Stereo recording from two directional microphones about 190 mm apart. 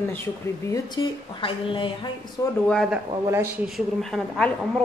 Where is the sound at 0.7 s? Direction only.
25° left (ahead or behind).